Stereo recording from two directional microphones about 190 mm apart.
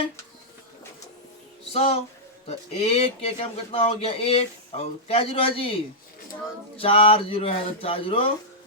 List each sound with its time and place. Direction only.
1.7 s speech: 30° left (ahead or behind)